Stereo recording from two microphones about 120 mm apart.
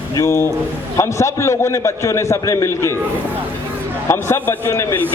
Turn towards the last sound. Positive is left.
turn(degrees=20)  # may be behind; listen again after turning